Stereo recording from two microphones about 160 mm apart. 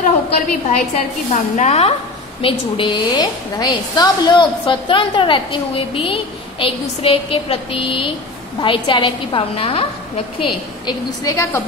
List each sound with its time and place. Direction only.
0.0 s a woman's voice: 45° left (ahead or behind)
2.4 s a woman's voice: 30° left (ahead or behind)